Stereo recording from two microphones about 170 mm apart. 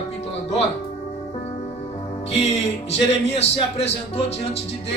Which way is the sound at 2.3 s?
40° left (ahead or behind).